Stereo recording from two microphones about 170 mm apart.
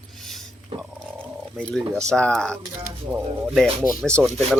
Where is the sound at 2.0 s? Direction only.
5° left (ahead or behind).